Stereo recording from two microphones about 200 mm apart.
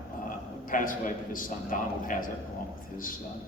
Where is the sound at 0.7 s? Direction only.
40° left (ahead or behind).